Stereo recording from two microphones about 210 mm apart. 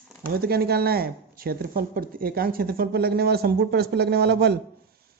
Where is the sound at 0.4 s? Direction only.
45° right (ahead or behind).